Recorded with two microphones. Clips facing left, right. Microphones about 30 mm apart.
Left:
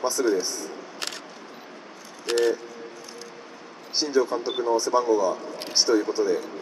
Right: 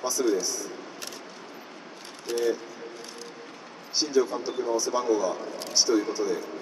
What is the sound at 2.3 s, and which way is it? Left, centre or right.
Speech, left.